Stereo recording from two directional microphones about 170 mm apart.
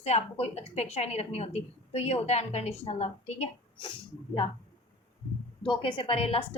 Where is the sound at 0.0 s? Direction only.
40° left (ahead or behind).